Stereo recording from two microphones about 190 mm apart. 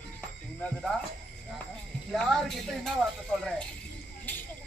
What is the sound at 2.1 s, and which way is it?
Speech, centre (ahead or behind).